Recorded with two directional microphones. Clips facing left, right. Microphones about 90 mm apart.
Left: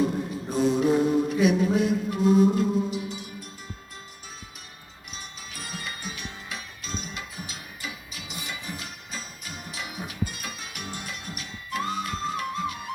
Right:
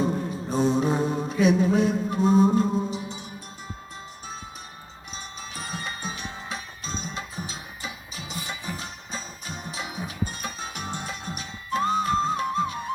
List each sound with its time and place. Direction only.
0.0 s mantra: 30° right (ahead or behind)
5.1 s music: 30° right (ahead or behind)